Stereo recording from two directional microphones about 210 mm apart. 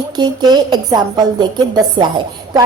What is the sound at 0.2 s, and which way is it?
A woman's voice, 20° right (ahead or behind).